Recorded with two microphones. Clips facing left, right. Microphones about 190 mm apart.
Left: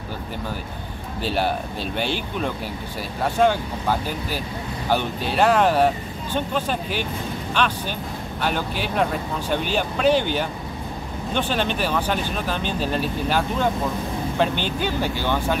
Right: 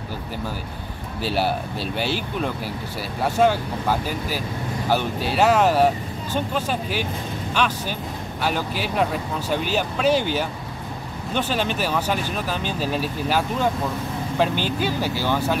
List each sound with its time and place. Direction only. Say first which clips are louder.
1.2 s speech: even; 5° right (ahead or behind)
3.2 s speech: even; 5° right (ahead or behind)